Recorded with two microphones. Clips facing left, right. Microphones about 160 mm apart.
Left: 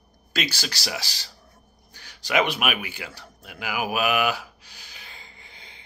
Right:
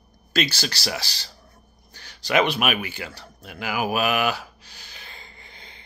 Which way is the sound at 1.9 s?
10° left (ahead or behind).